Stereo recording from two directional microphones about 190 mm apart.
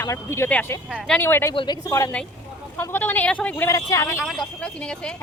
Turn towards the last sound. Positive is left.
turn(degrees=5)  # may be behind; listen again after turning